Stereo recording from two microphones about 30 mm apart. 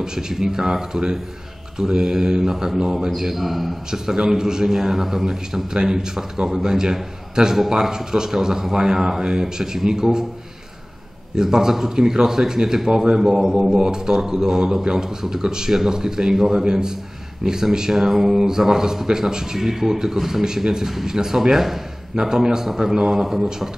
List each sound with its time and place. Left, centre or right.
0.0 s speech: right
3.3 s a man's voice: centre
3.9 s speech: centre
11.3 s speech: centre
23.2 s speech: centre